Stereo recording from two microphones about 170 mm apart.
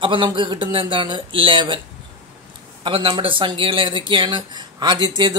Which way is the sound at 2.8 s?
30° right (ahead or behind).